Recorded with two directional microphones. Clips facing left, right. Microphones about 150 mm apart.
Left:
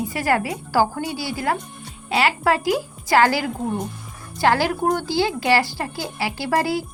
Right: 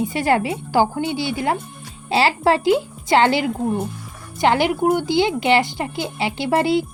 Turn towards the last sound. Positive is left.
turn(degrees=-25)  # may be behind; listen again after turning